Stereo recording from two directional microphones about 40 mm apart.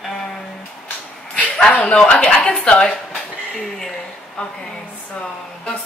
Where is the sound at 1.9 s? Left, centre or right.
Left.